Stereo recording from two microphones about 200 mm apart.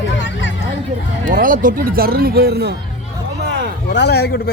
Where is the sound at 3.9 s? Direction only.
55° left (ahead or behind).